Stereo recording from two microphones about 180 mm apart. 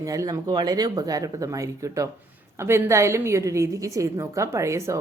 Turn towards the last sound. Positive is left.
turn(degrees=-15)  # may be behind; listen again after turning